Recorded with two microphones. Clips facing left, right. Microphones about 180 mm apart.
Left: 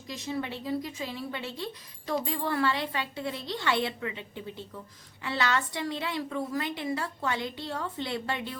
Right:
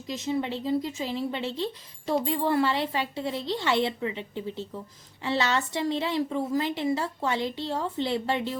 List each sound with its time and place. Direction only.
0.1 s a woman's voice: 20° right (ahead or behind)